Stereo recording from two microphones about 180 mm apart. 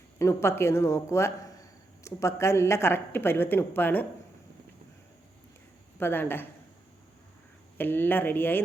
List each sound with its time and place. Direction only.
0.2 s speech: 15° left (ahead or behind)
6.0 s speech: 10° left (ahead or behind)
7.8 s speech: 10° left (ahead or behind)